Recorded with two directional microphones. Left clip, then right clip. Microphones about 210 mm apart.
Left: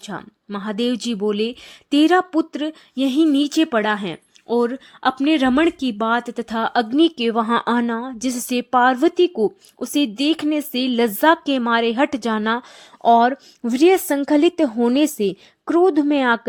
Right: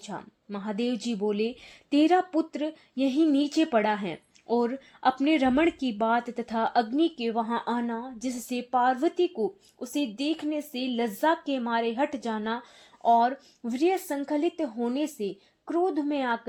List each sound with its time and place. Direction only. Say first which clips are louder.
0.0 s speech: left 7 dB; 20° left (ahead or behind)